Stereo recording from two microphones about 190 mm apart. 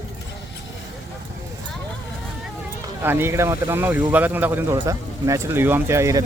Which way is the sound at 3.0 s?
10° right (ahead or behind).